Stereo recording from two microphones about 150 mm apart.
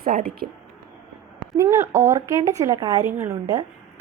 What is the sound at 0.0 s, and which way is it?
Speech, 70° right (ahead or behind).